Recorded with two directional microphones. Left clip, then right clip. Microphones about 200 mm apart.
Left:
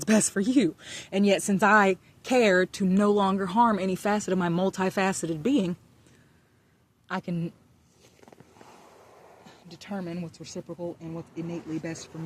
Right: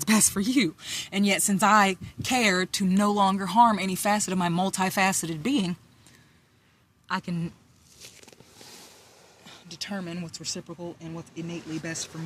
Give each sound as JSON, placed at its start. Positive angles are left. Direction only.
{"t": 0.0, "sound": "speech", "side_deg": -45}
{"t": 7.1, "sound": "a woman's voice", "side_deg": -35}
{"t": 9.6, "sound": "speech", "side_deg": -10}